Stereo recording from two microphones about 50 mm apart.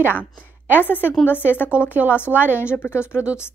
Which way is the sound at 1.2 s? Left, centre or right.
Left.